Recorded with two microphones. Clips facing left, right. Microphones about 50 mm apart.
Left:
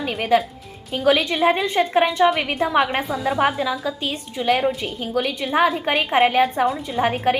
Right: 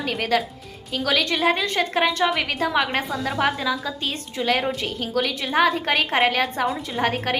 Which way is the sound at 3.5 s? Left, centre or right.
Centre.